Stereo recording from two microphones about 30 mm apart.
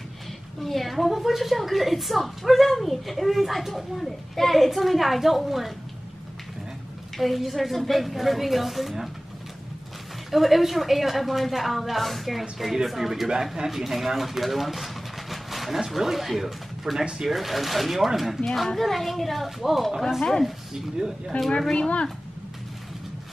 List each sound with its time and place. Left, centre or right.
0.6 s a woman's voice: centre
7.2 s a woman's voice: centre
10.3 s a woman's voice: centre
18.4 s a woman's voice: centre
20.2 s speech: centre
21.5 s speech: centre
21.7 s speech: left